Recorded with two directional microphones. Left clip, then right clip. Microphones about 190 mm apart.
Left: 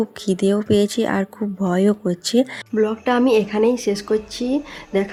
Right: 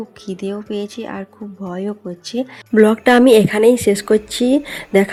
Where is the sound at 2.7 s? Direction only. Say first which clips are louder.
Right 11 dB; 30° right (ahead or behind).